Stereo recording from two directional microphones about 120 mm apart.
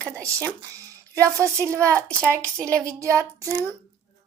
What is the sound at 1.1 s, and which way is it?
Speech, 25° right (ahead or behind).